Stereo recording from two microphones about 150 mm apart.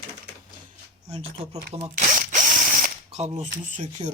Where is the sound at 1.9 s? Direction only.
55° right (ahead or behind).